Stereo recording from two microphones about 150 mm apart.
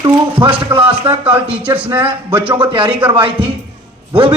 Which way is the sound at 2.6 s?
35° right (ahead or behind).